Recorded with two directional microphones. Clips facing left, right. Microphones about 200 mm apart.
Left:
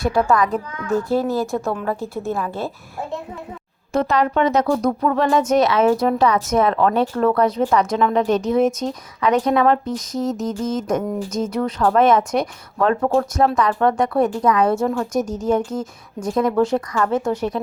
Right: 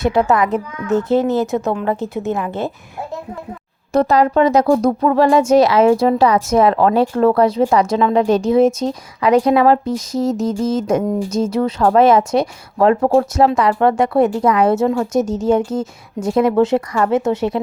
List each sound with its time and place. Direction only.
0.0 s speech: 20° right (ahead or behind)
3.9 s speech: 35° right (ahead or behind)